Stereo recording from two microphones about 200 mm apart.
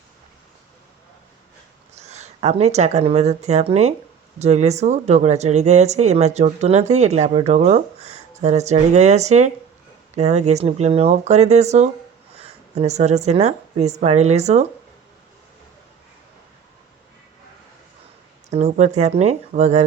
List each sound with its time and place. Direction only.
2.0 s speech: 35° right (ahead or behind)
18.5 s speech: 35° right (ahead or behind)